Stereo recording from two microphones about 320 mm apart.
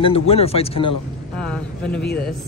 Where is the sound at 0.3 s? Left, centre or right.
Centre.